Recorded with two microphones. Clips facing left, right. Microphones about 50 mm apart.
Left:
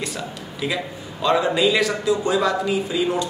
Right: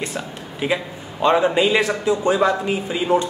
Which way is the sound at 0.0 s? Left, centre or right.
Right.